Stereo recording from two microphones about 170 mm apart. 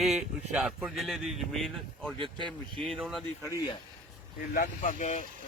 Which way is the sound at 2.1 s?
30° right (ahead or behind).